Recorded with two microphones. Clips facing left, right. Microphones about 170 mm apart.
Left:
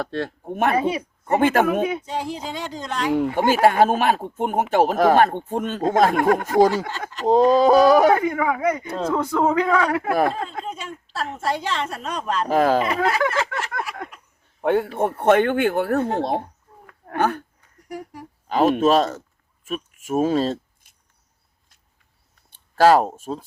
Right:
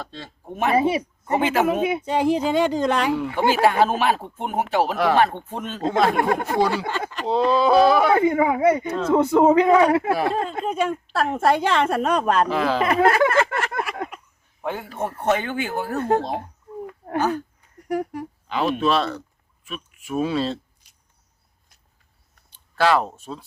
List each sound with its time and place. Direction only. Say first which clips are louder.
0.0 s a man's voice: left 10 dB; 65° left (ahead or behind); by 1.6 s 50° left (ahead or behind)
2.0 s a woman's voice: right 8 dB; 65° right (ahead or behind)
3.1 s speech: left 2 dB; 50° left (ahead or behind)
8.2 s a man's voice: right 4 dB; 25° right (ahead or behind)
10.1 s speech: left 2 dB; 50° left (ahead or behind)
10.3 s a woman's voice: right 6 dB; 60° right (ahead or behind)
12.5 s speech: left 4 dB; 45° left (ahead or behind)
12.8 s a sound: right 4 dB; 55° right (ahead or behind)
14.6 s speech: left 8 dB; 60° left (ahead or behind)
17.2 s speech: even; 55° left (ahead or behind)
17.8 s speech: right 9 dB; 65° right (ahead or behind)
18.4 s speech: left 5 dB; 45° left (ahead or behind)
22.4 s speech: left 5 dB; 40° left (ahead or behind)